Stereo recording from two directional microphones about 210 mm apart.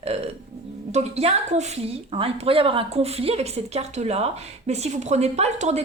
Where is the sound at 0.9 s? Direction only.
30° right (ahead or behind).